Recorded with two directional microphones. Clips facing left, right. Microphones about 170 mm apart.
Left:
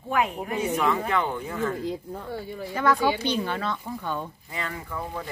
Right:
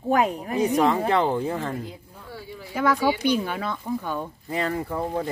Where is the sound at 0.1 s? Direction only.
40° right (ahead or behind).